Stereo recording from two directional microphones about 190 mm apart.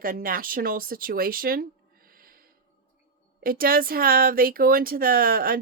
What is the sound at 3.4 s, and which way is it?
Speech, 50° right (ahead or behind).